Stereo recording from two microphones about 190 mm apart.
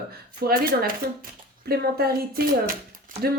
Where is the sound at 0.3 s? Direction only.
50° right (ahead or behind).